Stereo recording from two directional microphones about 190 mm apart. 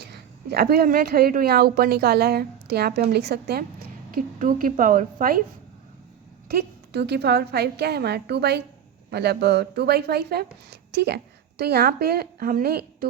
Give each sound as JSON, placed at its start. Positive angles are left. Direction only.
{"t": 0.0, "sound": "a woman's voice", "side_deg": -55}
{"t": 6.5, "sound": "speech", "side_deg": -60}